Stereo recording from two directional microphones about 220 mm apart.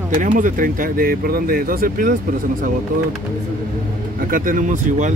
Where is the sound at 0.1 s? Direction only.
35° right (ahead or behind).